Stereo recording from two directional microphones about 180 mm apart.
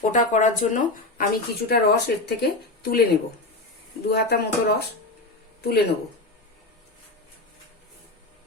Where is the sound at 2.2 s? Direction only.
60° left (ahead or behind).